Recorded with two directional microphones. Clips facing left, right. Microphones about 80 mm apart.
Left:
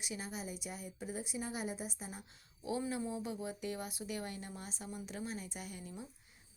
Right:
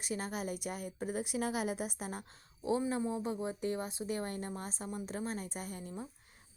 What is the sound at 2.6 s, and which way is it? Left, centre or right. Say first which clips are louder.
A woman's voice: right 5 dB; right.